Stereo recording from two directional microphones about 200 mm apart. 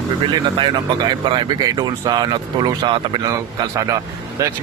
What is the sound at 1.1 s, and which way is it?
Speech, 20° right (ahead or behind).